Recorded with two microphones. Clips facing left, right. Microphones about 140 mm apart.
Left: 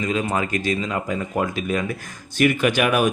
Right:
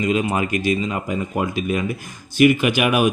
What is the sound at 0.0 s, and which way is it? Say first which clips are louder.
Speech: right 3 dB; 15° right (ahead or behind).